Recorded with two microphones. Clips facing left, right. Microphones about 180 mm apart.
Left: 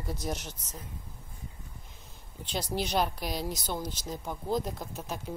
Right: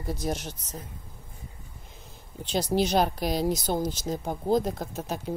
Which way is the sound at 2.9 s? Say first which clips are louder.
Right 5 dB; 40° right (ahead or behind).